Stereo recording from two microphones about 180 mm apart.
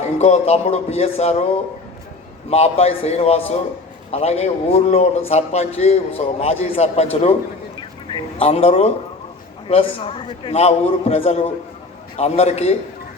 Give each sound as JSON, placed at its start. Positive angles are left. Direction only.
{"t": 0.0, "sound": "a man's voice", "side_deg": 35}
{"t": 2.5, "sound": "a man's voice", "side_deg": 35}